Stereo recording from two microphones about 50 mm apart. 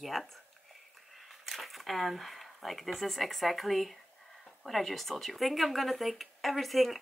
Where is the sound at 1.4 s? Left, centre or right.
Centre.